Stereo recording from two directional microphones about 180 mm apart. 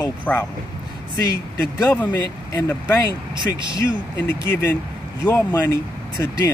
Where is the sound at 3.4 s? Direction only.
25° right (ahead or behind).